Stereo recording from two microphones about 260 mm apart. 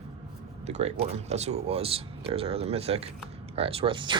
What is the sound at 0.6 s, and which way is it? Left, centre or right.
Speech, right.